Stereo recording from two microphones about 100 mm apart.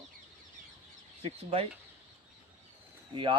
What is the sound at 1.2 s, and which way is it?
Speech, 90° right.